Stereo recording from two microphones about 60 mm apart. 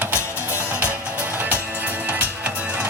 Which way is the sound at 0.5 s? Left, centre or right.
Right.